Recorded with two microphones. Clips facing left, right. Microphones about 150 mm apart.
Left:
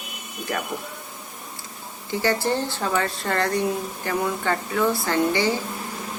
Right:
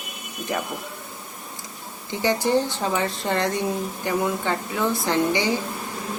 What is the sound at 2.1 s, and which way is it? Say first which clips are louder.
Speech: right 2 dB; 20° right (ahead or behind).